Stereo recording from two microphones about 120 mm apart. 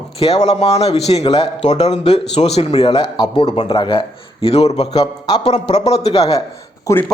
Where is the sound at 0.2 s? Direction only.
60° left (ahead or behind).